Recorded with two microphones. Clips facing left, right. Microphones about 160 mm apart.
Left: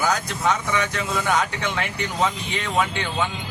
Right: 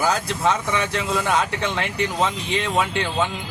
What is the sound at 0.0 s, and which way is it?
Speech, 30° right (ahead or behind).